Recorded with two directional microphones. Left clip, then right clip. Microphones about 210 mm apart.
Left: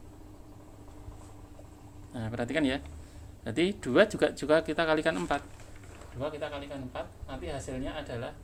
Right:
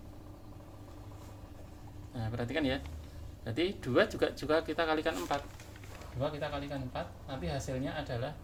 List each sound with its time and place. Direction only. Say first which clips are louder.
2.1 s speech: left 4 dB; 40° left (ahead or behind)